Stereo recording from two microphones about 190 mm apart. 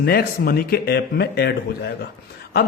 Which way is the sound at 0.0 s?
55° left (ahead or behind).